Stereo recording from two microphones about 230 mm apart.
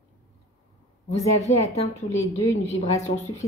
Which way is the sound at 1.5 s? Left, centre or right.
Left.